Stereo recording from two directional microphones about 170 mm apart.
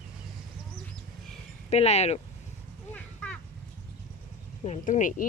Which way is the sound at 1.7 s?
40° left (ahead or behind).